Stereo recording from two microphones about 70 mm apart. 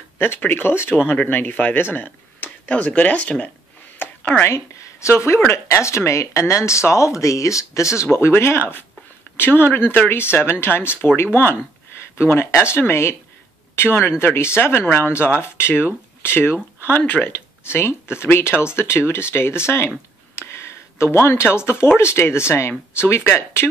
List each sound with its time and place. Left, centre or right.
0.2 s speech: left
4.0 s a sound: left
4.5 s speech: left
8.0 s speech: left
20.3 s a sound: left
21.9 s speech: left